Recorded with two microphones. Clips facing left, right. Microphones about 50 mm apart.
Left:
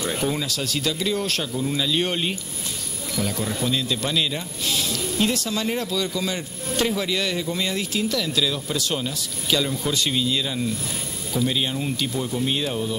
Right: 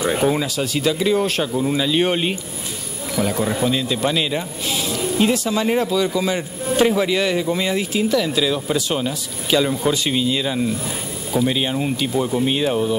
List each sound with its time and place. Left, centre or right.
0.0 s speech: centre